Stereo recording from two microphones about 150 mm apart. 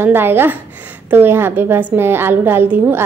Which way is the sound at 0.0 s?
15° right (ahead or behind).